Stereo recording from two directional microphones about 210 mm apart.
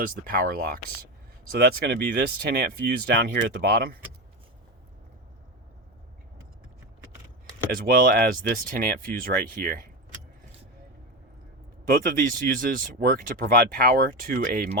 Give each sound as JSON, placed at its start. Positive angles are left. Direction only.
{"t": 0.0, "sound": "speech", "side_deg": -45}
{"t": 7.7, "sound": "speech", "side_deg": -45}
{"t": 12.2, "sound": "speech", "side_deg": -40}